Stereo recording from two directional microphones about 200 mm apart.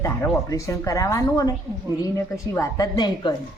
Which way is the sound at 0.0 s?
15° left (ahead or behind).